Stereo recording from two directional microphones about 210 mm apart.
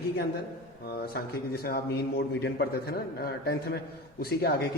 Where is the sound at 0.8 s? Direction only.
50° left (ahead or behind).